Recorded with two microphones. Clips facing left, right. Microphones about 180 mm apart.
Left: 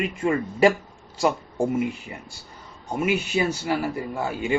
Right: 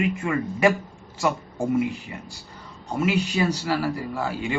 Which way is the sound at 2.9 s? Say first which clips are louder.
Right 1 dB; 20° left (ahead or behind).